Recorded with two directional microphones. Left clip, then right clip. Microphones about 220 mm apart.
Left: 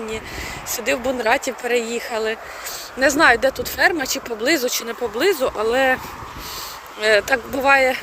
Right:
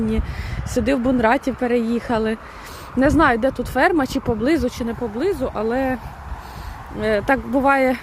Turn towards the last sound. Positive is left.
turn(degrees=-15)  # may be behind; listen again after turning